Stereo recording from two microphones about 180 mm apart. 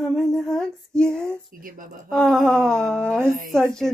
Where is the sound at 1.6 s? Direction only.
50° right (ahead or behind).